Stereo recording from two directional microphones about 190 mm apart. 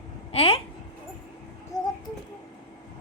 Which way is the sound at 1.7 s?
20° left (ahead or behind).